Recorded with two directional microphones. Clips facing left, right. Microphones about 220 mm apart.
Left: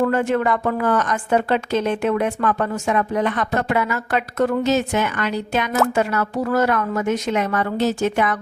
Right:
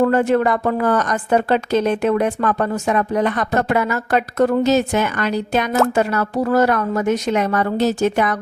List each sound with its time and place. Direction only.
0.0 s a woman's voice: 40° right (ahead or behind)